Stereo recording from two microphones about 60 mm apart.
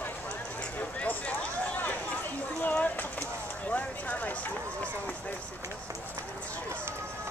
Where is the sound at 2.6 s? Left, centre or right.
Left.